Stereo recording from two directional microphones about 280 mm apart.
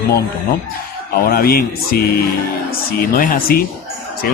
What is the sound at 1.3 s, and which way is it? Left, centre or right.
A man's voice, left.